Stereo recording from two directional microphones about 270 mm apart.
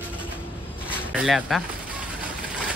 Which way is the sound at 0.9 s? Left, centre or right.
Centre.